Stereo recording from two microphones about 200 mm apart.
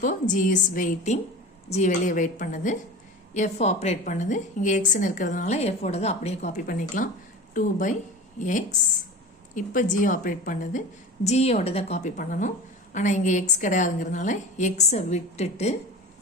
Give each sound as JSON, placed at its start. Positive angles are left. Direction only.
{"t": 0.0, "sound": "a woman's voice", "side_deg": 40}